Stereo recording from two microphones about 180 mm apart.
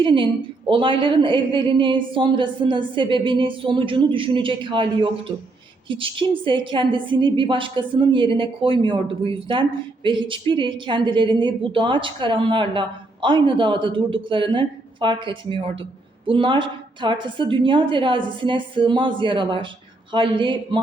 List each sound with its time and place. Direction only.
0.0 s a woman's voice: 25° right (ahead or behind)